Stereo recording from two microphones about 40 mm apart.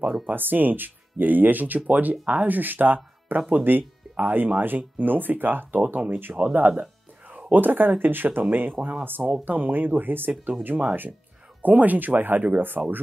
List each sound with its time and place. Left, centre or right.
0.3 s speech: right
7.3 s speech: right
10.7 s speech: right